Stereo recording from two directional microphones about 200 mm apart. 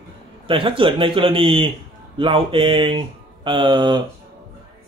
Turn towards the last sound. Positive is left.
turn(degrees=-20)  # may be behind; listen again after turning